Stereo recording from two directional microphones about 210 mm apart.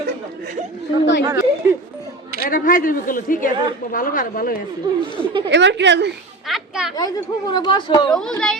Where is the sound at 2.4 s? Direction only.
40° left (ahead or behind).